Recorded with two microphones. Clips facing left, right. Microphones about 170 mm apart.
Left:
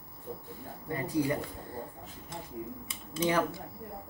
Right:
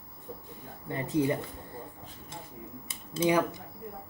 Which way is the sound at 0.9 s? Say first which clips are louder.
Right 2 dB; 25° right (ahead or behind).